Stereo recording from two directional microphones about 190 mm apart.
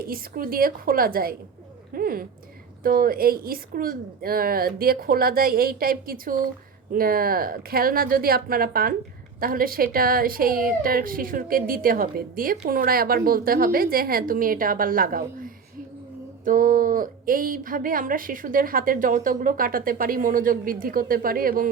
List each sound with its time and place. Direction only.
0.0 s speech: 50° right (ahead or behind)